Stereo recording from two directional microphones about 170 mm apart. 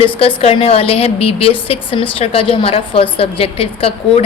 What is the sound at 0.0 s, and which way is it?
A woman's voice, 35° left (ahead or behind).